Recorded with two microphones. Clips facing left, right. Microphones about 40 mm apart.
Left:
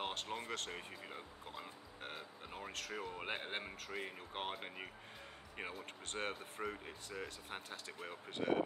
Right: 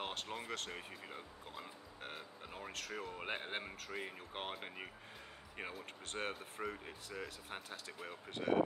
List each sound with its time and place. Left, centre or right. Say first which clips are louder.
0.0 s speech: left 1 dB; centre